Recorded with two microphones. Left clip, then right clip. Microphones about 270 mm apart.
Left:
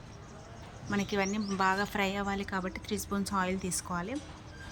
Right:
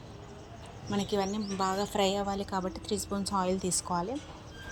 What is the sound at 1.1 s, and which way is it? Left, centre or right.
Speech, centre.